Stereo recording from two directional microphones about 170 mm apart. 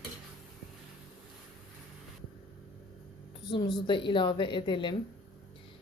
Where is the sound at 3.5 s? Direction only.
25° left (ahead or behind).